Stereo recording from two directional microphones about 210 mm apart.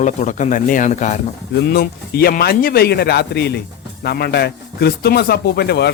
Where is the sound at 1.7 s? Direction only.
50° left (ahead or behind).